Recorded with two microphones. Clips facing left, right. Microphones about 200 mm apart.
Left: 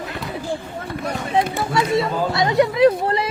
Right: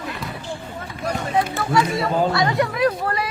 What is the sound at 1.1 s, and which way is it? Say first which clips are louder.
Speech: left 1 dB; 20° left (ahead or behind).